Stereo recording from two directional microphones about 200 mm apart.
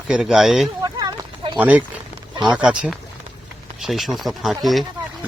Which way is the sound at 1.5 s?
5° right (ahead or behind).